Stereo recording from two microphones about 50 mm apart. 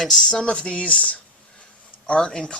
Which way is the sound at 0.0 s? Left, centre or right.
Centre.